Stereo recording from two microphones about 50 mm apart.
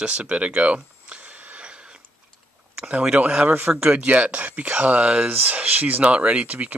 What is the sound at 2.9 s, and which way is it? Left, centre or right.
Speech, right.